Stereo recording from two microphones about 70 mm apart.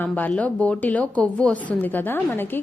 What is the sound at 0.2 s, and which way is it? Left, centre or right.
A woman's voice, centre.